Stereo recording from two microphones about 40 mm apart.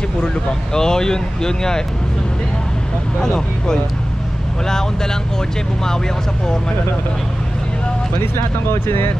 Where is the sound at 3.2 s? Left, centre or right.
Centre.